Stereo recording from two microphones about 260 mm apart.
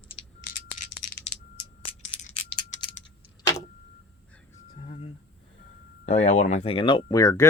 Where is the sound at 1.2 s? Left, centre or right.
Left.